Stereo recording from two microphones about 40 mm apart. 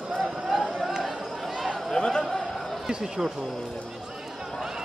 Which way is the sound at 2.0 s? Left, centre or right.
Centre.